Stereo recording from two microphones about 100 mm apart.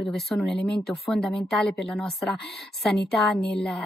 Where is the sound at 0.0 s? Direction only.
5° left (ahead or behind).